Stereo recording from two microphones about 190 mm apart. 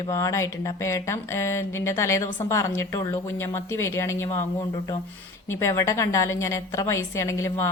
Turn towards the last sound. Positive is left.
turn(degrees=15)  # may be behind; listen again after turning